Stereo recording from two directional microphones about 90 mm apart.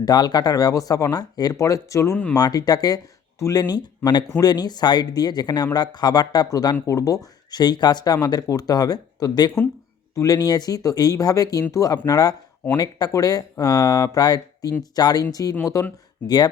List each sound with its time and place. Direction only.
0.0 s speech: 50° left (ahead or behind)
16.2 s speech: 50° left (ahead or behind)